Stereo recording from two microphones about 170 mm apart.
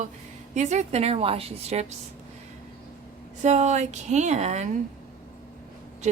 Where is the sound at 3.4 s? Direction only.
45° right (ahead or behind).